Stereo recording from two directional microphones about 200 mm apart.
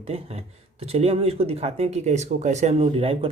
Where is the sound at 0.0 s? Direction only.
30° right (ahead or behind).